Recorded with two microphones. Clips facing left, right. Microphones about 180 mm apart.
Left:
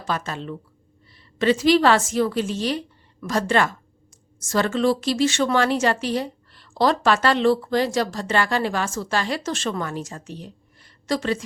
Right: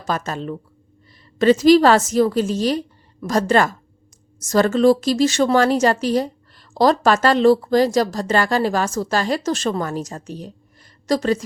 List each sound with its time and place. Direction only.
0.0 s a woman's voice: 45° right (ahead or behind)